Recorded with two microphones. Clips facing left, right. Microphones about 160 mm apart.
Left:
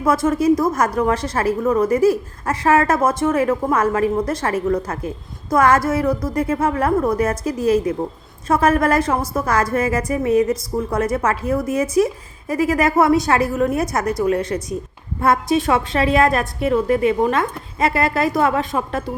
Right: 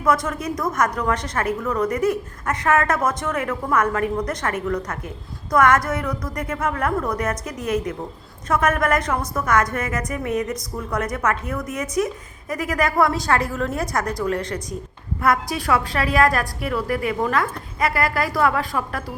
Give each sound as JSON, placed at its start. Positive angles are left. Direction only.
{"t": 0.0, "sound": "a woman's voice", "side_deg": 25}